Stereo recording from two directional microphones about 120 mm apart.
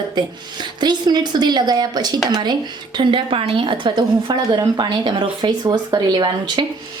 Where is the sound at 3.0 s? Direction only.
45° right (ahead or behind).